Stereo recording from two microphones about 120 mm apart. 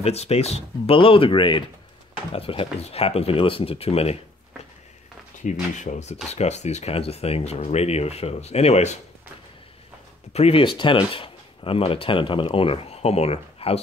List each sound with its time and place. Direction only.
0.0 s speech: 60° left (ahead or behind)
5.4 s speech: 85° left
6.2 s speech: 65° left (ahead or behind)
10.3 s speech: 55° left (ahead or behind)